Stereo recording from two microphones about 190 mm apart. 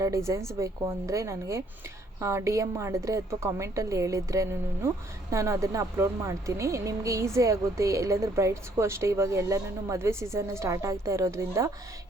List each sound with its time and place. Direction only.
0.0 s speech: 15° right (ahead or behind)